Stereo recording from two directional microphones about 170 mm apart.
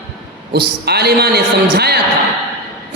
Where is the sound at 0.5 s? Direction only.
70° right (ahead or behind).